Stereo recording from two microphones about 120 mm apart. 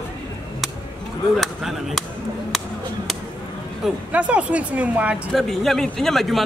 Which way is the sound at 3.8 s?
10° right (ahead or behind).